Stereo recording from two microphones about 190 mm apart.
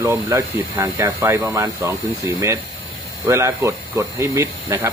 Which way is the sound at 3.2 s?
15° right (ahead or behind).